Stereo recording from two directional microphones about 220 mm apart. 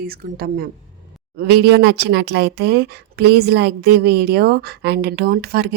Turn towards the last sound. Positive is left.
turn(degrees=-45)  # may be behind; listen again after turning